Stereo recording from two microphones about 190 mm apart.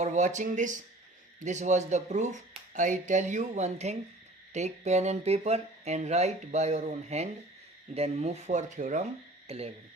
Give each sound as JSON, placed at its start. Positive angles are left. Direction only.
{"t": 0.0, "sound": "speech", "side_deg": -40}